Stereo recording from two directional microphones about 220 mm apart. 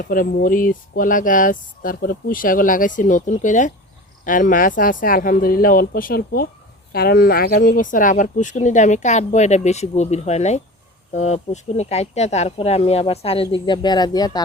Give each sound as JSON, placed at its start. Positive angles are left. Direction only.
{"t": 0.0, "sound": "speech", "side_deg": 40}